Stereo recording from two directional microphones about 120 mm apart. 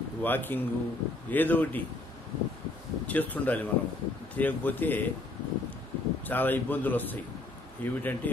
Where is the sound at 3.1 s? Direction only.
15° left (ahead or behind).